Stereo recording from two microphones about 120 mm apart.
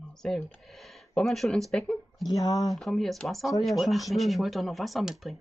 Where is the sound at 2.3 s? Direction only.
30° left (ahead or behind).